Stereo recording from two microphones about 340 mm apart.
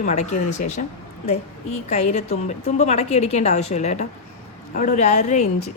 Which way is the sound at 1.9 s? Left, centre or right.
Left.